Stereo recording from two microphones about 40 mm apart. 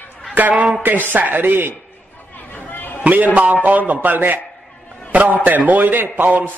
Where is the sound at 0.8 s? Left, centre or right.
Right.